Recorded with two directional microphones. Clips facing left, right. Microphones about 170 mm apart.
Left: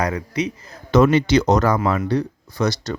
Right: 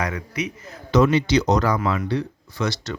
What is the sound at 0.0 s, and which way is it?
Speech, 30° left (ahead or behind).